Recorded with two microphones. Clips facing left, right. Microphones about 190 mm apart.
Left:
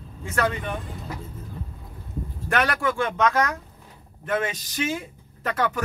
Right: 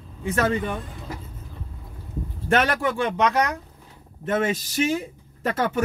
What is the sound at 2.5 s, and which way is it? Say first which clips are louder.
Speech: right 2 dB; 25° right (ahead or behind).